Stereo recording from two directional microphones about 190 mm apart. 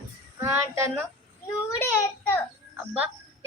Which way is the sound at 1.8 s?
10° left (ahead or behind).